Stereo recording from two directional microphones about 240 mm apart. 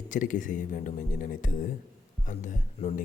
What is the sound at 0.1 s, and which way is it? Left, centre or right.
Speech, left.